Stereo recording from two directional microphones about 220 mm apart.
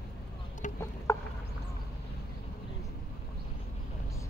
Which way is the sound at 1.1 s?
15° left (ahead or behind).